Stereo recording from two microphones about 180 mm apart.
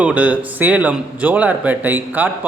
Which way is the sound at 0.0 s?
10° right (ahead or behind).